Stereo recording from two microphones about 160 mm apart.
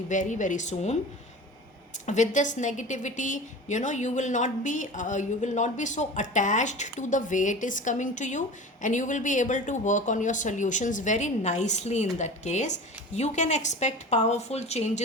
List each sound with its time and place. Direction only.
0.1 s a woman's voice: 50° left (ahead or behind)
2.0 s a woman's voice: 50° left (ahead or behind)